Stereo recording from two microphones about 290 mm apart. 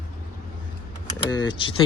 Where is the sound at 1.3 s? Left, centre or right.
Centre.